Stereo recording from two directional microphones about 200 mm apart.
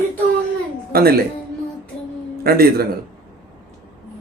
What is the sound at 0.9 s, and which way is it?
Speech, 50° right (ahead or behind).